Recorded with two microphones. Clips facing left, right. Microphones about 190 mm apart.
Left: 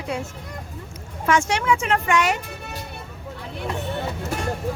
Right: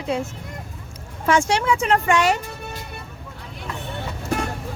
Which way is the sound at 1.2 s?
30° right (ahead or behind).